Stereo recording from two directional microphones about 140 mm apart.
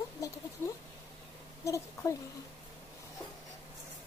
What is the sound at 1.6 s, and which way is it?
Speech, 20° left (ahead or behind).